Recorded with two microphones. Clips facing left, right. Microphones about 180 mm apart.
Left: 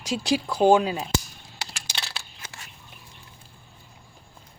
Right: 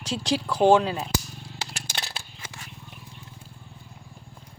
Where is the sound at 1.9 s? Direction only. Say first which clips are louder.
Right 1 dB; 50° right (ahead or behind).